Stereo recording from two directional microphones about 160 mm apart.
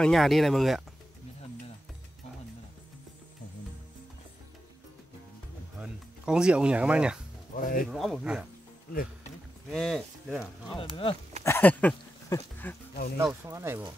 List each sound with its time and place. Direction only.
0.0 s speech: centre (ahead or behind)
5.8 s speech: 5° right (ahead or behind)
7.5 s speech: 60° left (ahead or behind)
7.9 s speech: 5° right (ahead or behind)
9.7 s speech: centre (ahead or behind)
10.8 s speech: 30° left (ahead or behind)
11.4 s a sound: 10° left (ahead or behind)
12.3 s speech: 10° left (ahead or behind)
13.2 s speech: 20° right (ahead or behind)